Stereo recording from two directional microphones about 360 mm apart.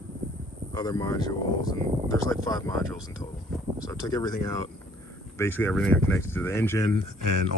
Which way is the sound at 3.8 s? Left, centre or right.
Centre.